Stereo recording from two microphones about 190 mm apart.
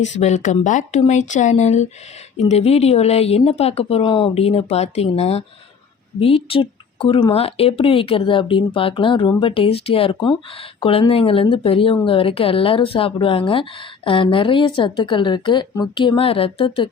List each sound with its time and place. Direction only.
0.1 s a woman's voice: 40° left (ahead or behind)